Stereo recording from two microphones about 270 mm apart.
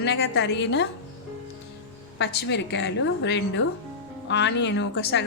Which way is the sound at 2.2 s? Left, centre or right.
Left.